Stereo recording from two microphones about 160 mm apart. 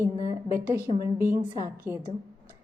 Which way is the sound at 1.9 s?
15° right (ahead or behind).